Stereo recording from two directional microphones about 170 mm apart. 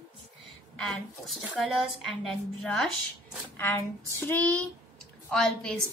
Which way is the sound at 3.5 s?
15° left (ahead or behind).